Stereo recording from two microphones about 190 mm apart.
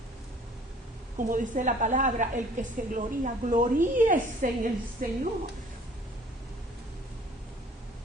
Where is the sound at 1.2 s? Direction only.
45° right (ahead or behind).